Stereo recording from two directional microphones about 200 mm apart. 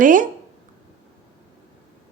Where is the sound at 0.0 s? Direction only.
40° right (ahead or behind).